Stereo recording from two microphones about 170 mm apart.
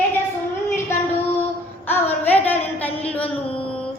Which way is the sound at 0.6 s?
15° left (ahead or behind).